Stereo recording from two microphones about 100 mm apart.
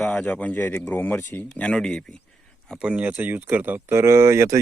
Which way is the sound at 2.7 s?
10° right (ahead or behind).